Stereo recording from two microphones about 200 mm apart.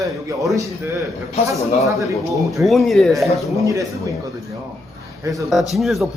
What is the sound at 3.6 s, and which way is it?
Speech, 15° right (ahead or behind).